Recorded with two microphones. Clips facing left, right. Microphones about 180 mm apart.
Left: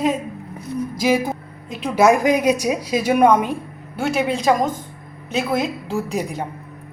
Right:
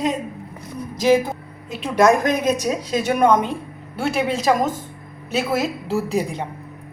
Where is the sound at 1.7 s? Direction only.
5° left (ahead or behind).